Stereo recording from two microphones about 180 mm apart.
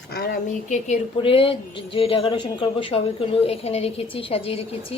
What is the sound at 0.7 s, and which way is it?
A woman's voice, 35° left (ahead or behind).